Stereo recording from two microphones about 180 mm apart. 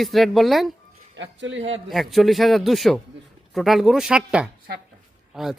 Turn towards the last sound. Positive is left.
turn(degrees=0)  # may be behind; listen again after turning